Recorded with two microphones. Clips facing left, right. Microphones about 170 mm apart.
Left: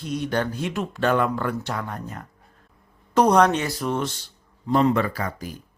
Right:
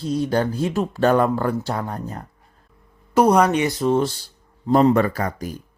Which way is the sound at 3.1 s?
10° right (ahead or behind).